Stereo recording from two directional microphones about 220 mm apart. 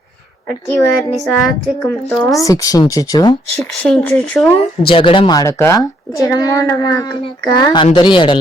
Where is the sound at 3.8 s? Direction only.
5° left (ahead or behind).